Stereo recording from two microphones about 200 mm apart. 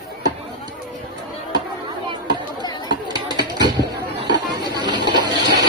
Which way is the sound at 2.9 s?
20° right (ahead or behind).